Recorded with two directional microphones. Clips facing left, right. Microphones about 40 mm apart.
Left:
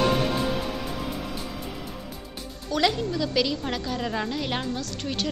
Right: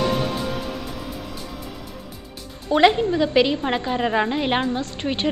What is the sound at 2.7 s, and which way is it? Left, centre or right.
A woman's voice, right.